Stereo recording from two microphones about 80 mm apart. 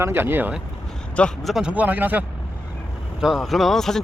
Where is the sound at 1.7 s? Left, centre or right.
Centre.